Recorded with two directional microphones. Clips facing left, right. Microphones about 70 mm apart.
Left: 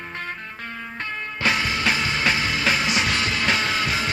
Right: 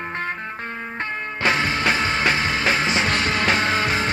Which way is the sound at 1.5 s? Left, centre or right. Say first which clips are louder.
Right 2 dB; right.